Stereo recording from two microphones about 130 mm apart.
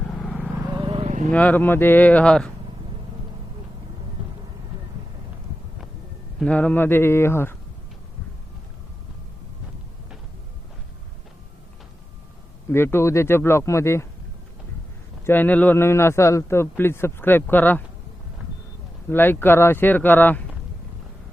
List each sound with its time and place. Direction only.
0.0 s vehicle: centre (ahead or behind)
0.8 s vehicle: 45° right (ahead or behind)
1.3 s a man's voice: 10° left (ahead or behind)
6.4 s a man's voice: 10° left (ahead or behind)
12.7 s speech: 20° left (ahead or behind)
15.3 s a man's voice: 15° left (ahead or behind)
19.0 s a man's voice: 15° left (ahead or behind)